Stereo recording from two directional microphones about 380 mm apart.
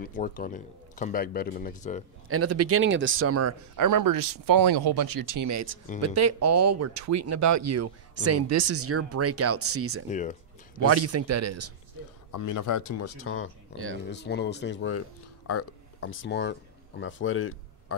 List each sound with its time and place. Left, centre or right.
0.0 s a man's voice: left
2.2 s speech: right
3.7 s speech: right
10.0 s a man's voice: centre
10.9 s speech: right
12.3 s speech: left